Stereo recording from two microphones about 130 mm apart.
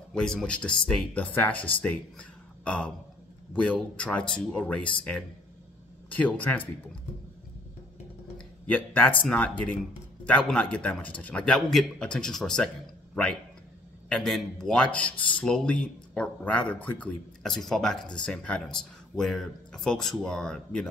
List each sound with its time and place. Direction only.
0.1 s speech: 5° left (ahead or behind)
8.4 s speech: 10° left (ahead or behind)
14.0 s speech: 5° left (ahead or behind)